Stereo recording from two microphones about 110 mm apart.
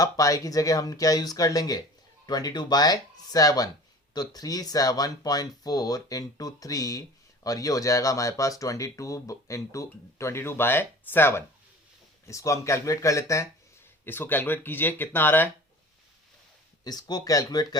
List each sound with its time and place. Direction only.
0.0 s speech: 30° left (ahead or behind)
16.8 s speech: 35° left (ahead or behind)